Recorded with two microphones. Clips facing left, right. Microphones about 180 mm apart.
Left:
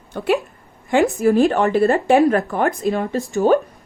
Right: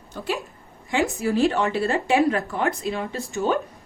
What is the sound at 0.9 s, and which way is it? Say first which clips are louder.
Speech: left 7 dB; 55° left (ahead or behind).